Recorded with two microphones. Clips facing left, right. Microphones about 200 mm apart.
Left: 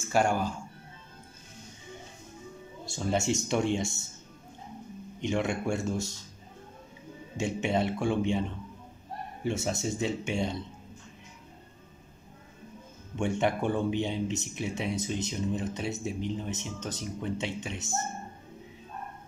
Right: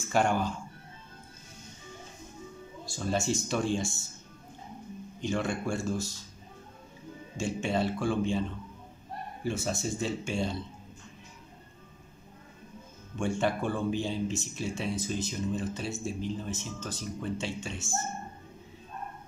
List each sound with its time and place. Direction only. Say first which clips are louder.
0.0 s speech: left 1 dB; 10° left (ahead or behind)
2.8 s speech: left 2 dB; 25° left (ahead or behind)
5.2 s speech: left 2 dB; 20° left (ahead or behind)
7.3 s speech: left 1 dB; 20° left (ahead or behind)
13.2 s speech: left 1 dB; 20° left (ahead or behind)